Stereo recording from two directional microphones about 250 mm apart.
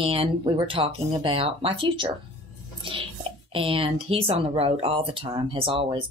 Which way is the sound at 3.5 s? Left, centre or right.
Right.